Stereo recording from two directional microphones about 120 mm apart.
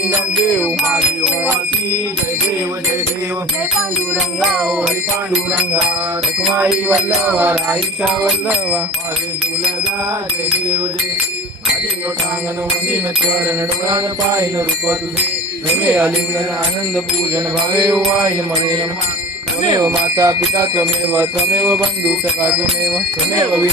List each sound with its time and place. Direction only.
0.8 s music: centre (ahead or behind)
4.4 s music: centre (ahead or behind)
15.7 s music: 10° right (ahead or behind)
17.8 s music: 5° right (ahead or behind)
19.6 s speech: 35° right (ahead or behind)
19.9 s bicycle bell: 25° right (ahead or behind)
21.1 s music: 15° right (ahead or behind)